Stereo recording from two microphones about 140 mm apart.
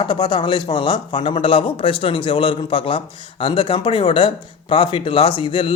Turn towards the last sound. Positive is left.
turn(degrees=40)  # may be behind; listen again after turning